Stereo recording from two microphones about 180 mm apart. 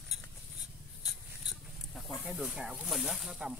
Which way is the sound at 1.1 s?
Centre (ahead or behind).